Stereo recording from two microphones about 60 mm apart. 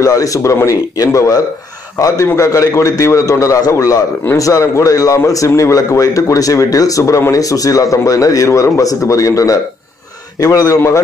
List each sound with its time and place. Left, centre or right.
0.0 s a man's voice: left